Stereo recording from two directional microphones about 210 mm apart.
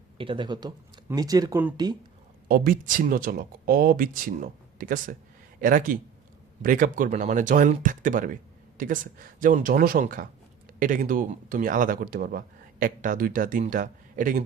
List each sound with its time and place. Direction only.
0.2 s speech: 25° right (ahead or behind)
2.5 s speech: 40° right (ahead or behind)